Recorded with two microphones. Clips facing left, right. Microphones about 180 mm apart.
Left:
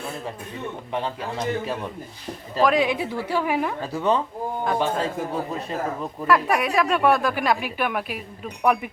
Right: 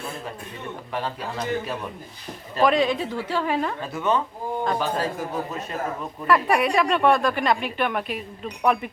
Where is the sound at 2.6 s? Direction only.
Centre (ahead or behind).